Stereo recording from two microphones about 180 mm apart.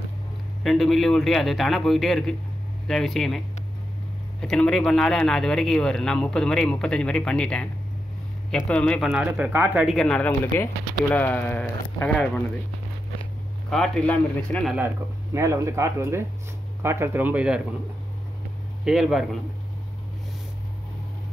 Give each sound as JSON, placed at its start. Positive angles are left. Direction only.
{"t": 0.7, "sound": "speech", "side_deg": 0}
{"t": 9.8, "sound": "speech", "side_deg": 5}
{"t": 13.7, "sound": "speech", "side_deg": 5}
{"t": 15.3, "sound": "speech", "side_deg": -15}
{"t": 18.9, "sound": "speech", "side_deg": -5}